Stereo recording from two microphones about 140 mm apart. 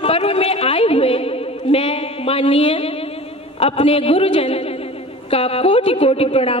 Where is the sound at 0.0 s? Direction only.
45° left (ahead or behind).